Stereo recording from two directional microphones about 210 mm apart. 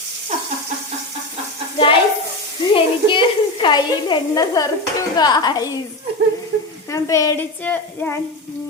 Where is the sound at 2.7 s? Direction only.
25° left (ahead or behind).